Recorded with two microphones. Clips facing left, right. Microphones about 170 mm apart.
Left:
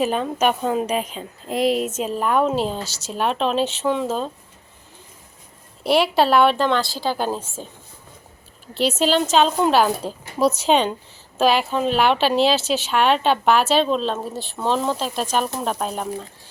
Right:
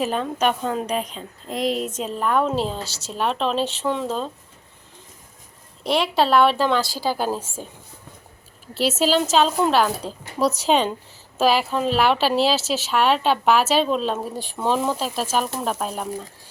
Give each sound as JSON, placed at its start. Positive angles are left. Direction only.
{"t": 0.0, "sound": "speech", "side_deg": 5}
{"t": 2.8, "sound": "speech", "side_deg": -30}
{"t": 3.1, "sound": "speech", "side_deg": 5}
{"t": 5.8, "sound": "a woman's voice", "side_deg": 5}
{"t": 8.7, "sound": "speech", "side_deg": -5}
{"t": 10.0, "sound": "speech", "side_deg": 15}
{"t": 10.6, "sound": "speech", "side_deg": 0}